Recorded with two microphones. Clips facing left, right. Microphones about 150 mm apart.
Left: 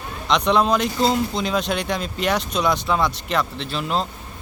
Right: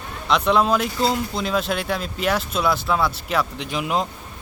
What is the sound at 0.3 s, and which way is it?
Speech, 5° right (ahead or behind).